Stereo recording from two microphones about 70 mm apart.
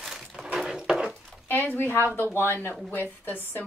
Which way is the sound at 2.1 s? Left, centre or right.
Left.